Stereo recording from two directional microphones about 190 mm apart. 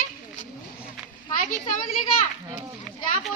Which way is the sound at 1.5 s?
45° left (ahead or behind).